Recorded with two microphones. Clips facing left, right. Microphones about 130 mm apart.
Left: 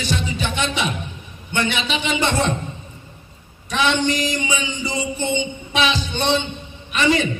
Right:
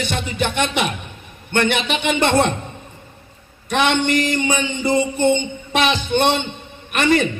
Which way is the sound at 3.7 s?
55° right (ahead or behind).